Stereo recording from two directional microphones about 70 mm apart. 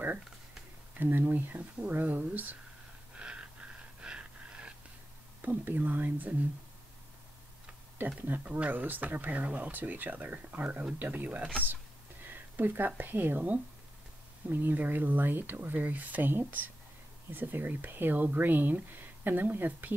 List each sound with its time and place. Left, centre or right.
0.9 s speech: right
3.2 s a sound: centre
5.4 s speech: right
8.3 s speech: right